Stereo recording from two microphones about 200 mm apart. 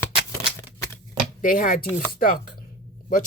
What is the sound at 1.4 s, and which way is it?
Speech, 45° left (ahead or behind).